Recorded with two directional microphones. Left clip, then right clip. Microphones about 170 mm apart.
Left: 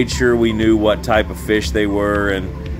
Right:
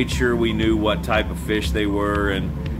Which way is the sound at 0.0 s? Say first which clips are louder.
Left 5 dB; 35° left (ahead or behind).